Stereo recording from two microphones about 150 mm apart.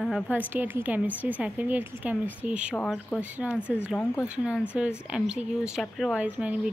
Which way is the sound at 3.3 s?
10° right (ahead or behind).